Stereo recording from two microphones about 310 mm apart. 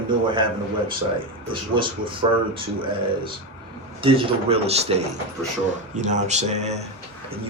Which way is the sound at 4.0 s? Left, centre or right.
Centre.